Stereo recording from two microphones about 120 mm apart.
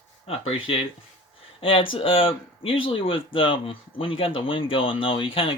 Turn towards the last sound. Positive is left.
turn(degrees=50)  # may be behind; listen again after turning